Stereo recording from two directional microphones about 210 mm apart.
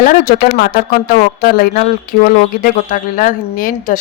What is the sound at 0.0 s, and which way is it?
Speech, 45° left (ahead or behind).